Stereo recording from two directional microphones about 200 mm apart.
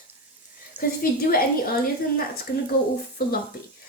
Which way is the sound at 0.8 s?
45° left (ahead or behind).